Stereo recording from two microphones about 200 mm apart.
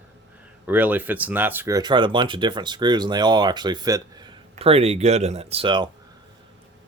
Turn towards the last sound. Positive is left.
turn(degrees=-25)  # may be behind; listen again after turning